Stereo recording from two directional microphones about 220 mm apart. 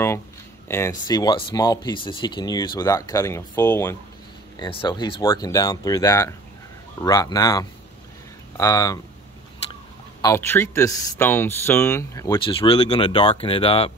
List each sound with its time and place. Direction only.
0.7 s speech: 10° left (ahead or behind)
4.6 s speech: 20° left (ahead or behind)
10.2 s speech: 10° left (ahead or behind)